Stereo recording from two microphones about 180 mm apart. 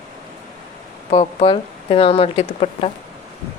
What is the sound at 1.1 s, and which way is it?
A woman's voice, 30° left (ahead or behind).